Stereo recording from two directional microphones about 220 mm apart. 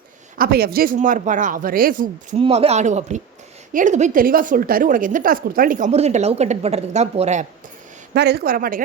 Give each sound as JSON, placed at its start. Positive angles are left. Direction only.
{"t": 0.3, "sound": "a woman's voice", "side_deg": -45}
{"t": 2.4, "sound": "a man's voice", "side_deg": -30}
{"t": 8.1, "sound": "speech", "side_deg": -50}